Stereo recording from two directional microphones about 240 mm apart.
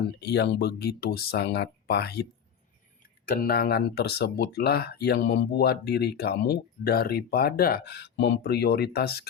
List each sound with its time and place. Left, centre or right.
0.2 s speech: left
3.2 s speech: left